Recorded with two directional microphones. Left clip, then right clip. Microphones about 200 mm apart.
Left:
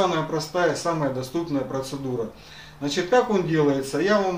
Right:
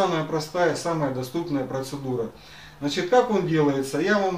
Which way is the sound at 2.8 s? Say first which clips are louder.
Even; 20° left (ahead or behind).